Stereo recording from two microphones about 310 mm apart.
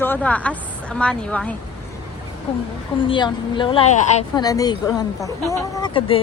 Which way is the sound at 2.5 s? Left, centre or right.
Centre.